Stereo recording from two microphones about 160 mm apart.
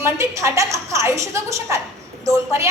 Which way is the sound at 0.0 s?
20° right (ahead or behind).